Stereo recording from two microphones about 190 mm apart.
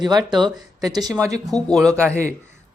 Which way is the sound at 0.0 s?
20° right (ahead or behind).